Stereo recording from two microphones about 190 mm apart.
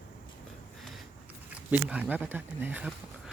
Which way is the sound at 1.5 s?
5° right (ahead or behind).